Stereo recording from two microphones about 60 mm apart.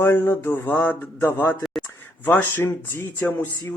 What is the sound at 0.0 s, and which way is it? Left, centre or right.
Speech, left.